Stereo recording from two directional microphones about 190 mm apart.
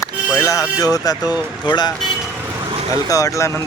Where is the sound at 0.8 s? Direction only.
20° left (ahead or behind).